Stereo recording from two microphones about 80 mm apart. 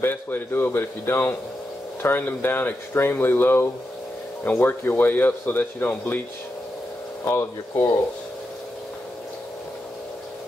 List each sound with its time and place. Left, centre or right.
0.0 s speech: left
7.2 s speech: left